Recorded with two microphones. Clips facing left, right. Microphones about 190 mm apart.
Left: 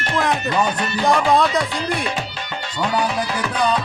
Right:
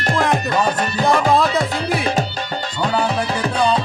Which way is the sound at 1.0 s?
Centre (ahead or behind).